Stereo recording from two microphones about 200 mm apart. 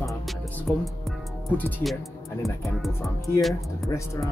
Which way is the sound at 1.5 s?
10° left (ahead or behind).